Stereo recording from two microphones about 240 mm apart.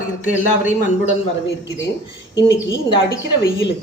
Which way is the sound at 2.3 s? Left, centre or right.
Centre.